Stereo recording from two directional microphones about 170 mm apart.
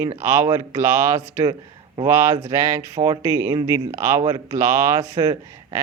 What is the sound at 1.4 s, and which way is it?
Speech, 25° right (ahead or behind).